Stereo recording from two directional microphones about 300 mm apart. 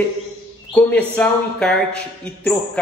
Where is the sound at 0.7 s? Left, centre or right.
Centre.